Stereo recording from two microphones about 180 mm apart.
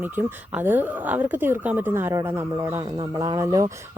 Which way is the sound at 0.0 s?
10° right (ahead or behind).